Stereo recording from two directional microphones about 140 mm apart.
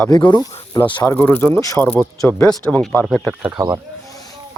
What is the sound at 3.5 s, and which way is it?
Speech, 20° right (ahead or behind).